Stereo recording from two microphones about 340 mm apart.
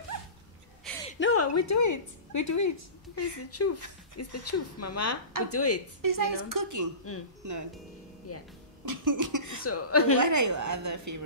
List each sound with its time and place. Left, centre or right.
0.9 s a sound: centre
1.2 s speech: left
3.4 s a woman's voice: left
6.0 s a woman's voice: right
8.3 s music: left
8.8 s cough: right
9.7 s a woman's voice: left
10.1 s a woman's voice: right